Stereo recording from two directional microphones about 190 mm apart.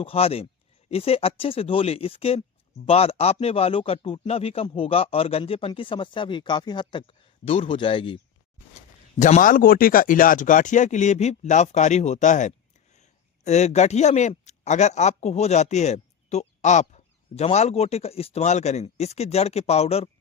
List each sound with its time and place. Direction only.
0.0 s speech: 30° left (ahead or behind)
9.1 s a man's voice: 40° left (ahead or behind)